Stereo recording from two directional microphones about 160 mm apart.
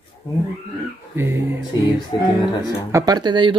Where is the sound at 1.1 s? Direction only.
15° right (ahead or behind).